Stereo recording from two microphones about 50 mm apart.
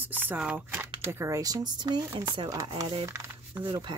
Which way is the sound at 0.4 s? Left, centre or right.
Right.